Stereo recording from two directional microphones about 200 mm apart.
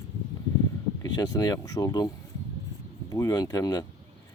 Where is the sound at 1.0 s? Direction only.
20° left (ahead or behind).